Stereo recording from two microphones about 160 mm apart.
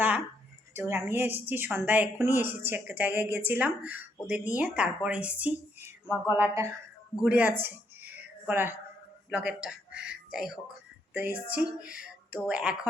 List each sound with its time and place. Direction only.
0.8 s a woman's voice: 15° right (ahead or behind)
7.6 s a sound: 10° right (ahead or behind)
9.3 s a woman's voice: 5° right (ahead or behind)